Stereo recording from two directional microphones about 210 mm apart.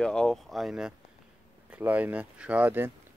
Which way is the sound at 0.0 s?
5° left (ahead or behind).